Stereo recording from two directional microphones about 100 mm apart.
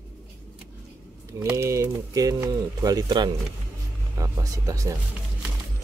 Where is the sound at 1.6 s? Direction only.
25° right (ahead or behind).